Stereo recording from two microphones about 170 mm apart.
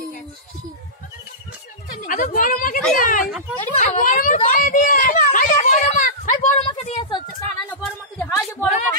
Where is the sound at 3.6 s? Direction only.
45° left (ahead or behind).